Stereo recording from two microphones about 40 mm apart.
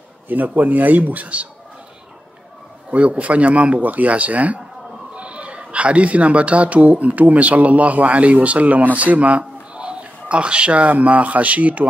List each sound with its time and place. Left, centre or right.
0.3 s speech: right
2.9 s speech: right
9.8 s speech: right